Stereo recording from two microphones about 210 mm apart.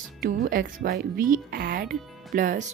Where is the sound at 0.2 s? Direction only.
45° right (ahead or behind).